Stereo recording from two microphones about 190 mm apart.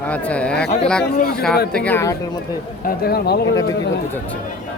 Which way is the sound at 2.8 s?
55° left (ahead or behind).